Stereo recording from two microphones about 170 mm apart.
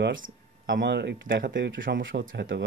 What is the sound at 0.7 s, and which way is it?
Speech, 90° right.